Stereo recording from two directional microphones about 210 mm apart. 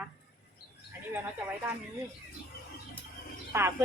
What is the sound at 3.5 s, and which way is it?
Speech, 10° right (ahead or behind).